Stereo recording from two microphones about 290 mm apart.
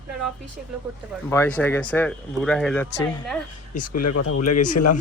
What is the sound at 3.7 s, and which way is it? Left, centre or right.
Speech, left.